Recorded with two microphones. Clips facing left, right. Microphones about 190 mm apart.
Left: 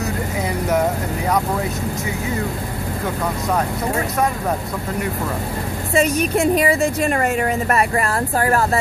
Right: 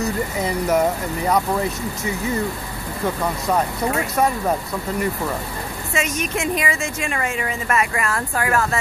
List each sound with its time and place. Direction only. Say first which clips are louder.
5.9 s a woman's voice: left 7 dB; 35° left (ahead or behind)